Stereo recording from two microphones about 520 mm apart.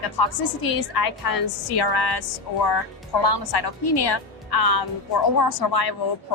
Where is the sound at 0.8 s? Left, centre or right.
Left.